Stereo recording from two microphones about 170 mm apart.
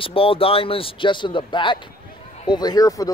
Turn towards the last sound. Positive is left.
turn(degrees=20)  # may be behind; listen again after turning